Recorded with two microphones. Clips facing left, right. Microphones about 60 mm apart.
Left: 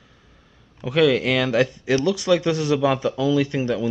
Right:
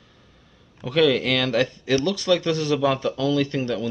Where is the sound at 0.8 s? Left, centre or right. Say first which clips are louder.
Left 1 dB; centre.